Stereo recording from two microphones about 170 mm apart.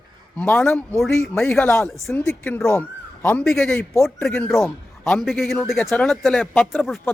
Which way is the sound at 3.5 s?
Centre (ahead or behind).